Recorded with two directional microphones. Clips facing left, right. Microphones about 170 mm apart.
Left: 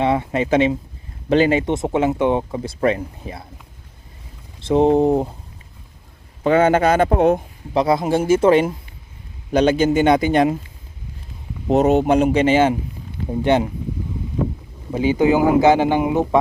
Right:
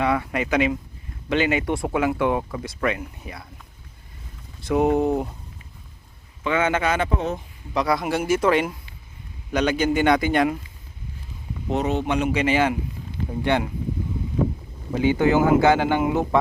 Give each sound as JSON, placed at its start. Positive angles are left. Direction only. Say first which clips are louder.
{"t": 0.0, "sound": "speech", "louder": "left 4 dB", "side_deg": 25}
{"t": 4.6, "sound": "speech", "louder": "left 5 dB", "side_deg": 25}
{"t": 6.4, "sound": "speech", "louder": "left 7 dB", "side_deg": 40}
{"t": 7.1, "sound": "speech", "louder": "left 10 dB", "side_deg": 55}
{"t": 7.7, "sound": "speech", "louder": "left 5 dB", "side_deg": 25}
{"t": 11.7, "sound": "speech", "louder": "left 8 dB", "side_deg": 45}
{"t": 14.9, "sound": "speech", "louder": "left 3 dB", "side_deg": 20}